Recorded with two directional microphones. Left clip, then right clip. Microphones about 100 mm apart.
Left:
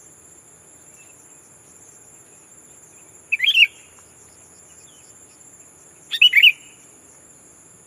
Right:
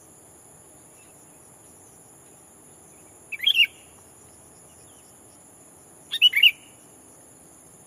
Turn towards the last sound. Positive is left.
turn(degrees=-15)  # may be behind; listen again after turning